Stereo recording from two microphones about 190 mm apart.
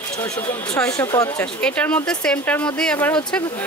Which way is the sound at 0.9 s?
15° left (ahead or behind).